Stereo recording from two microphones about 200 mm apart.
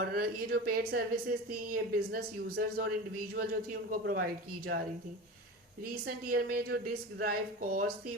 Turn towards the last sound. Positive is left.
turn(degrees=-45)  # may be behind; listen again after turning